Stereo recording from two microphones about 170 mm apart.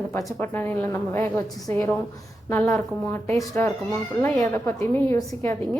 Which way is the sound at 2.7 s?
10° left (ahead or behind).